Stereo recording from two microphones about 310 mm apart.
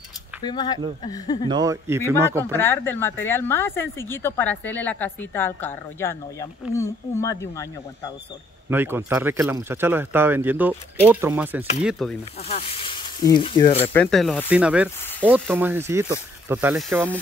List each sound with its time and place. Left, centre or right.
0.4 s a woman's voice: centre
1.5 s speech: centre
2.5 s a woman's voice: centre
8.6 s speech: centre
12.4 s speech: centre
13.9 s speech: centre